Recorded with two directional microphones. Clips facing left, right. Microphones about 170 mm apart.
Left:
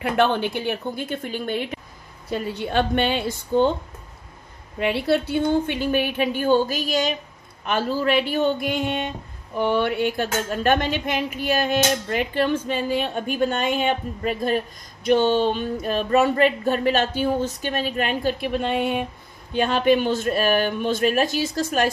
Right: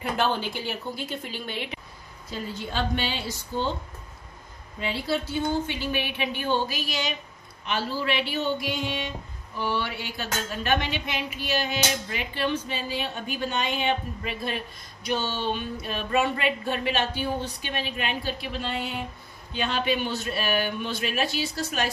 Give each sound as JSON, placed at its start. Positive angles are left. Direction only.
{"t": 0.0, "sound": "a woman's voice", "side_deg": 60}
{"t": 2.2, "sound": "a woman's voice", "side_deg": 65}
{"t": 4.7, "sound": "speech", "side_deg": 60}